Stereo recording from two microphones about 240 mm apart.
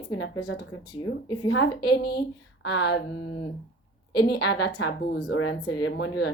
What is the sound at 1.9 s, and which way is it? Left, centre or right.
Speech, left.